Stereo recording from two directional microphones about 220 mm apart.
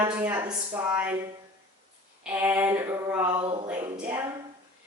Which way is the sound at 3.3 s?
25° right (ahead or behind).